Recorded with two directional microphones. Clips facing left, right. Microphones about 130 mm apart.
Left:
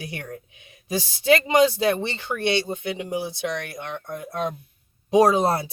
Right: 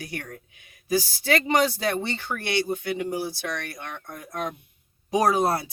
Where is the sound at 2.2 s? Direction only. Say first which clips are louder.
Left 6 dB; 25° left (ahead or behind).